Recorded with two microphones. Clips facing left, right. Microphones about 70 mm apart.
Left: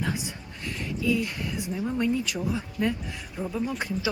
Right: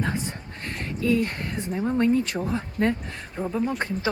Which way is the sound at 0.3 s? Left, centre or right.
Right.